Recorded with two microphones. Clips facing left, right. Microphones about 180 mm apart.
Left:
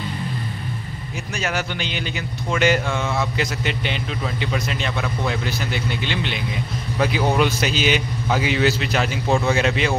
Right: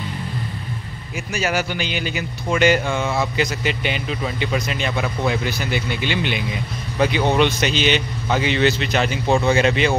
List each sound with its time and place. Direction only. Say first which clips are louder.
1.3 s speech: right 3 dB; 5° right (ahead or behind)